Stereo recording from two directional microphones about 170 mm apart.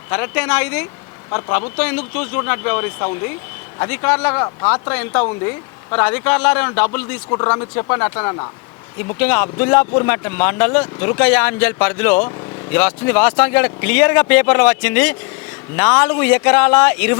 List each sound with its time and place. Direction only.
0.1 s speech: 10° left (ahead or behind)
1.3 s speech: 25° left (ahead or behind)
1.8 s speech: 10° left (ahead or behind)
7.3 s speech: 20° left (ahead or behind)
9.1 s speech: 10° left (ahead or behind)